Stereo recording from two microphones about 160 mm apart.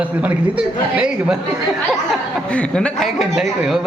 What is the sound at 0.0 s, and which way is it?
A man's voice, 10° right (ahead or behind).